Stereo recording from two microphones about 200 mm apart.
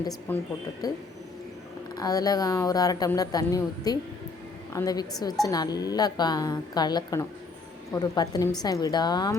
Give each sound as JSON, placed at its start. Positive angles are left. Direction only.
{"t": 0.0, "sound": "a woman's voice", "side_deg": 20}